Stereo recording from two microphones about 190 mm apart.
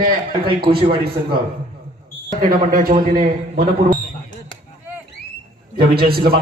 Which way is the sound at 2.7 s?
45° right (ahead or behind).